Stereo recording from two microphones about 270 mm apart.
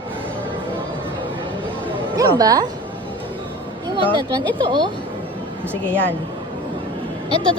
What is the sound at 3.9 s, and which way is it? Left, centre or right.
Speech, centre.